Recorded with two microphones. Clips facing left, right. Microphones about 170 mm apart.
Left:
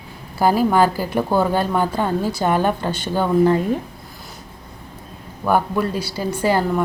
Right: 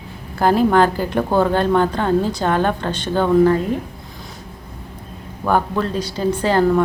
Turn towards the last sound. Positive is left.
turn(degrees=10)  # may be behind; listen again after turning